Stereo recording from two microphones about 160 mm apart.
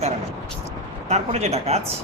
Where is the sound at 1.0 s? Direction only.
45° right (ahead or behind).